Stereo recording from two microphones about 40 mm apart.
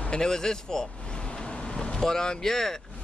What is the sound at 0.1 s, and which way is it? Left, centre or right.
Vehicle, centre.